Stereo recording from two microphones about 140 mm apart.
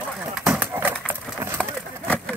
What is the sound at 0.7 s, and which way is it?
Vehicle, 15° right (ahead or behind).